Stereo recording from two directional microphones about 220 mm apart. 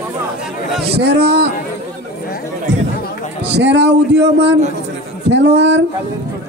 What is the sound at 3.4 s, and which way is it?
A man's voice, 50° right (ahead or behind).